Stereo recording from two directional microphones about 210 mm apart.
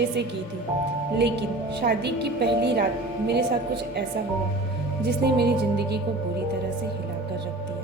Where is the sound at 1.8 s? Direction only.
50° right (ahead or behind).